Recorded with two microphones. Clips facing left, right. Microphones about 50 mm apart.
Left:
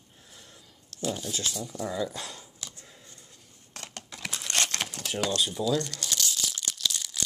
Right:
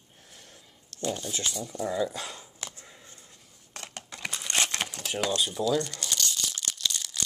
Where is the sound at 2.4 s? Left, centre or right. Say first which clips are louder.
Right 3 dB; right.